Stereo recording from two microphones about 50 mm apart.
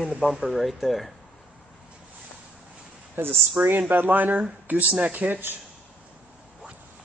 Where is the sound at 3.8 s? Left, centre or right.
Right.